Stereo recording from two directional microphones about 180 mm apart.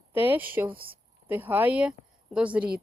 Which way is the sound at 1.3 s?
10° right (ahead or behind).